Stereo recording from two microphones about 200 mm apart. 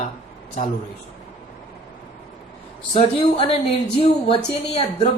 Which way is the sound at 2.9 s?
30° left (ahead or behind).